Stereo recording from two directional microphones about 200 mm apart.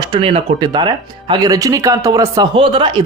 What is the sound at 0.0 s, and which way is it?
Speech, 25° right (ahead or behind).